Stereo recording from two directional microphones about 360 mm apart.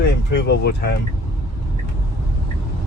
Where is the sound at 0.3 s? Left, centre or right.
Left.